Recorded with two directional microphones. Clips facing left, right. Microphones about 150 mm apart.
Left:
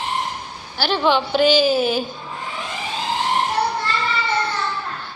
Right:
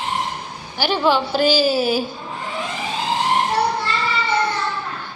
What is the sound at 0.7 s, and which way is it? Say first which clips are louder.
A woman's voice: even; 10° right (ahead or behind).